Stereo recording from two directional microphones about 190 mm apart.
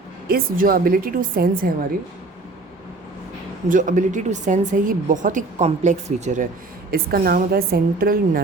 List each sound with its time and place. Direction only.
0.3 s a woman's voice: 50° right (ahead or behind)
3.7 s speech: 45° right (ahead or behind)
6.9 s a woman's voice: 50° right (ahead or behind)